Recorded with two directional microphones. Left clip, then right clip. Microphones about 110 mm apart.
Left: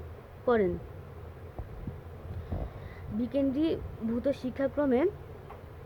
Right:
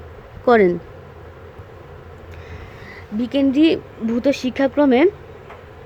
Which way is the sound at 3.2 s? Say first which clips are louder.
Right 13 dB; 90° right.